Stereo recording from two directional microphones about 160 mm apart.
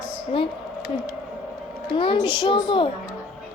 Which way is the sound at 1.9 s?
35° left (ahead or behind).